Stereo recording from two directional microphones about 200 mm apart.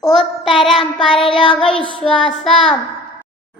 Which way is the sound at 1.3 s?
25° left (ahead or behind).